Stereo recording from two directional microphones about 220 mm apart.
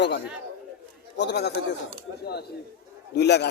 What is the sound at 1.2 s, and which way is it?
A man's voice, 50° left (ahead or behind).